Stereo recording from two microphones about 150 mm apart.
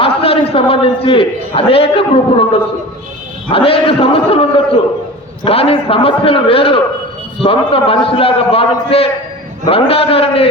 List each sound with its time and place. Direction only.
0.0 s a man's voice: 40° left (ahead or behind)
3.5 s a man's voice: 40° left (ahead or behind)